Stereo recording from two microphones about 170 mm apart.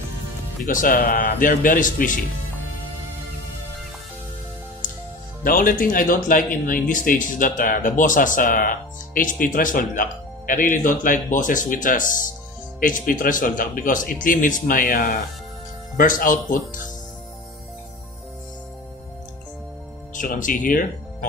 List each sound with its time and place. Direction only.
0.7 s speech: 55° left (ahead or behind)
5.4 s speech: 55° left (ahead or behind)
20.2 s speech: 50° left (ahead or behind)